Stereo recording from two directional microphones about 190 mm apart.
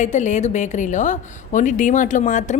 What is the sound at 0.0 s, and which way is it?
A woman's voice, 40° left (ahead or behind).